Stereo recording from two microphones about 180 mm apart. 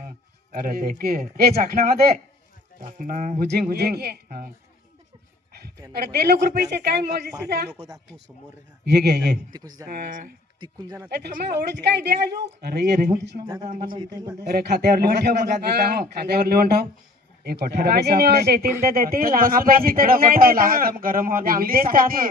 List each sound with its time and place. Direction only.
0.5 s a man's voice: 55° right (ahead or behind)
2.8 s a man's voice: 45° right (ahead or behind)
3.4 s a man's voice: 60° right (ahead or behind)
5.9 s a man's voice: 65° right (ahead or behind)
8.8 s a man's voice: 65° right (ahead or behind)
9.5 s a man's voice: 20° right (ahead or behind)
9.9 s a man's voice: 45° right (ahead or behind)
10.6 s a man's voice: 20° right (ahead or behind)
11.2 s a woman's voice: 65° right (ahead or behind)
13.6 s a man's voice: 45° right (ahead or behind)
13.9 s a man's voice: 25° right (ahead or behind)
14.4 s a man's voice: 60° right (ahead or behind)